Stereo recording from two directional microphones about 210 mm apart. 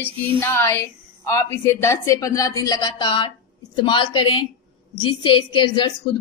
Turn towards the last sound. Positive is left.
turn(degrees=20)  # may be behind; listen again after turning